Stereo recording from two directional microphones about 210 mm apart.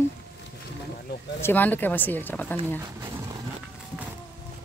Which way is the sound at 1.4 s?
10° left (ahead or behind).